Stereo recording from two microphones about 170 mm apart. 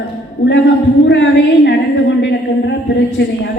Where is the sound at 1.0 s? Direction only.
90° left.